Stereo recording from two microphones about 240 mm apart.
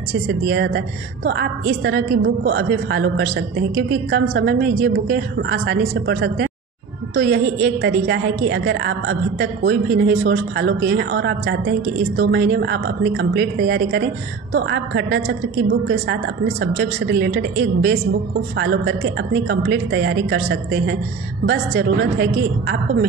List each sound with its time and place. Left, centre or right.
0.1 s a woman's voice: right